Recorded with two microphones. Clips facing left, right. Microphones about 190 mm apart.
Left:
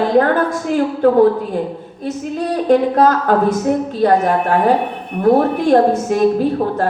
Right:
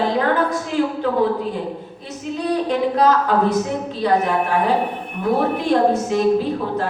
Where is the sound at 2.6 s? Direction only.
50° left (ahead or behind).